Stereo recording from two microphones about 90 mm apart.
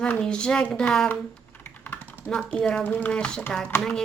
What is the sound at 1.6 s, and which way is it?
Typing, 25° left (ahead or behind).